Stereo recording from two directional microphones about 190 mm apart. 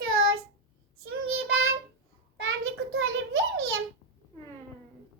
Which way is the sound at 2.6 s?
90° right.